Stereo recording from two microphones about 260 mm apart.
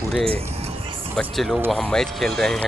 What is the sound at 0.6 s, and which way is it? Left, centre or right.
Music, right.